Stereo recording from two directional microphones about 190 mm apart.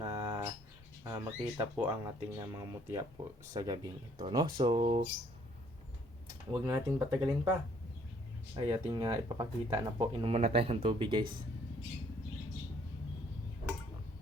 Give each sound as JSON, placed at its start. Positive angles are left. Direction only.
{"t": 0.0, "sound": "a sound", "side_deg": -15}
{"t": 1.0, "sound": "speech", "side_deg": -15}
{"t": 6.7, "sound": "speech", "side_deg": -15}
{"t": 8.5, "sound": "speech", "side_deg": -20}